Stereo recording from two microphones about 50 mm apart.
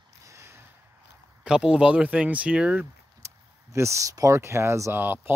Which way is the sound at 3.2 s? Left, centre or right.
Right.